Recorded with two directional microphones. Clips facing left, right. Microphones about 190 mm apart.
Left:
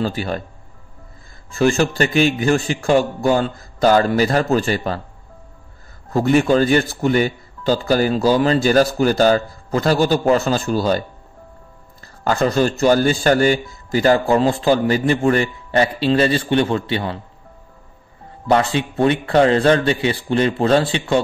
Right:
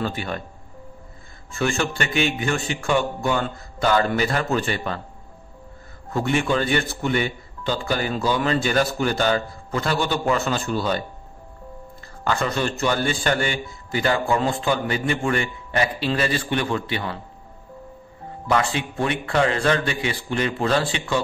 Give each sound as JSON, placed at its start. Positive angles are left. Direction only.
{"t": 0.0, "sound": "speech", "side_deg": 40}
{"t": 1.5, "sound": "speech", "side_deg": 35}
{"t": 6.1, "sound": "speech", "side_deg": 40}
{"t": 12.3, "sound": "speech", "side_deg": 40}
{"t": 18.5, "sound": "speech", "side_deg": 30}